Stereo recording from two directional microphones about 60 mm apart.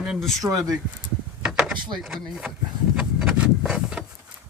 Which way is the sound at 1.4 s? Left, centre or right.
Centre.